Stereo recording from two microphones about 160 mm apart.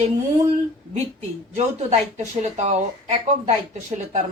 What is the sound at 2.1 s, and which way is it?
A woman's voice, 45° right (ahead or behind).